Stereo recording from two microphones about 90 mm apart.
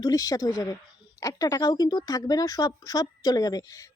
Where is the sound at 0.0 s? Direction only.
40° left (ahead or behind).